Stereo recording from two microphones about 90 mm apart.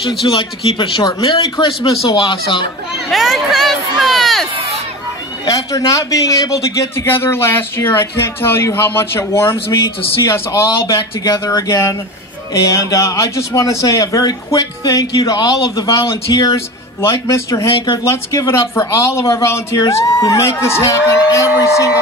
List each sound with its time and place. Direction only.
0.3 s speech: 70° left (ahead or behind)
3.1 s speech: centre (ahead or behind)
5.4 s a man's voice: 40° left (ahead or behind)
17.0 s a man's voice: 35° left (ahead or behind)